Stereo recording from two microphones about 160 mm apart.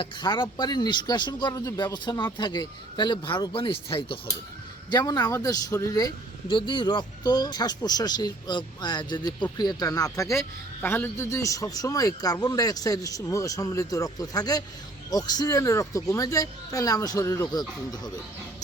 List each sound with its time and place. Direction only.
0.0 s a man's voice: 30° left (ahead or behind)